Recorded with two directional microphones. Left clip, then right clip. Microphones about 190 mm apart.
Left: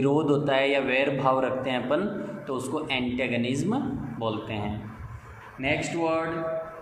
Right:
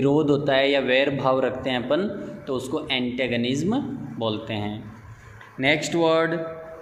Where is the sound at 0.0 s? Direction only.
25° right (ahead or behind).